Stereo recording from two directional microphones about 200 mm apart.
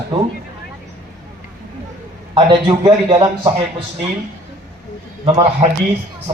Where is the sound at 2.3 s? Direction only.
25° right (ahead or behind).